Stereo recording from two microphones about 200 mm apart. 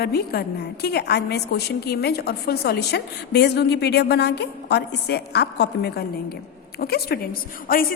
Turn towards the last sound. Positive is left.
turn(degrees=45)  # may be behind; listen again after turning